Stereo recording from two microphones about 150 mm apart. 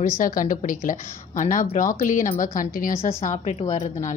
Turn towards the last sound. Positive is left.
turn(degrees=55)  # may be behind; listen again after turning